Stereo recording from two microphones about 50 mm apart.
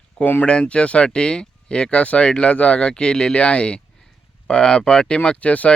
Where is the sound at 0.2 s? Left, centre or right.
Left.